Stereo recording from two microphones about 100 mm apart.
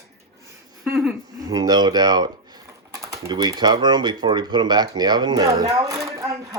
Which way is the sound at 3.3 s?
45° right (ahead or behind).